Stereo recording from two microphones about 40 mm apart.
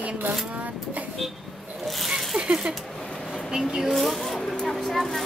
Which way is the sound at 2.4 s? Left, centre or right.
Right.